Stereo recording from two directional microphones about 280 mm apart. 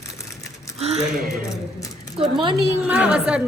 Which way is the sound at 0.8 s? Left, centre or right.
Right.